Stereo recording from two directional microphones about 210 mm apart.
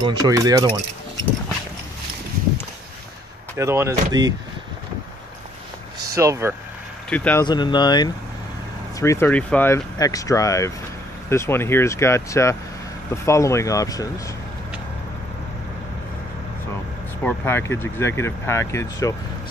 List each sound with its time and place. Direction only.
0.0 s speech: 15° right (ahead or behind)
3.5 s speech: 10° right (ahead or behind)
6.1 s speech: 15° right (ahead or behind)
7.1 s speech: 5° left (ahead or behind)
7.4 s speech: 20° left (ahead or behind)
17.2 s speech: 10° left (ahead or behind)